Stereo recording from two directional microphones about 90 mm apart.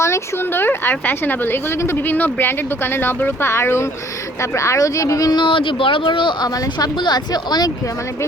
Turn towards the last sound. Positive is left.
turn(degrees=50)  # may be behind; listen again after turning